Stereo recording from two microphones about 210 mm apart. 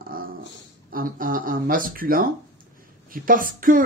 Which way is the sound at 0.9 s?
40° right (ahead or behind).